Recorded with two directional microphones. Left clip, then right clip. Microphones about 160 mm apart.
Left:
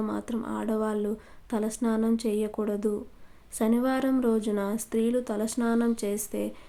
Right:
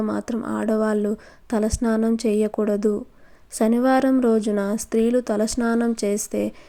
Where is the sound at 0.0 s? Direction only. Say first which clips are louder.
Right 6 dB; 35° right (ahead or behind).